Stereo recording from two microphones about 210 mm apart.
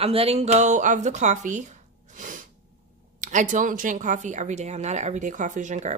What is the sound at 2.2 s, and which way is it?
Sneeze, 40° right (ahead or behind).